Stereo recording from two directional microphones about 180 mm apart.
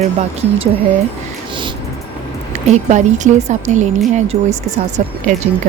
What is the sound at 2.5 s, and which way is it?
Speech, 40° right (ahead or behind).